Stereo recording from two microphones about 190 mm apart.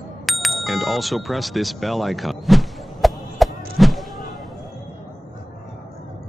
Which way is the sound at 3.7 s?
Centre (ahead or behind).